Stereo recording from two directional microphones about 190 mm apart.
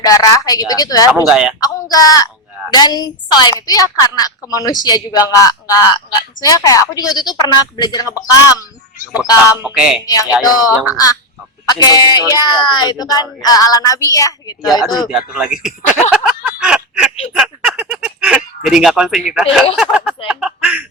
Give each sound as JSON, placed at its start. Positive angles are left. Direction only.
{"t": 0.0, "sound": "a woman's voice", "side_deg": 20}
{"t": 1.1, "sound": "speech", "side_deg": -5}
{"t": 1.6, "sound": "a woman's voice", "side_deg": 20}
{"t": 9.6, "sound": "speech", "side_deg": -10}
{"t": 10.1, "sound": "a woman's voice", "side_deg": 20}
{"t": 10.7, "sound": "speech", "side_deg": -5}
{"t": 10.9, "sound": "a woman's voice", "side_deg": 20}
{"t": 15.0, "sound": "speech", "side_deg": -5}
{"t": 16.1, "sound": "a sound", "side_deg": -5}
{"t": 17.3, "sound": "speech", "side_deg": 0}